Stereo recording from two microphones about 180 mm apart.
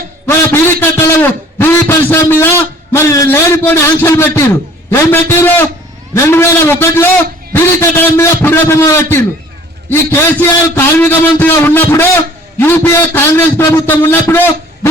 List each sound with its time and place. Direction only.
0.8 s a man's voice: 10° left (ahead or behind)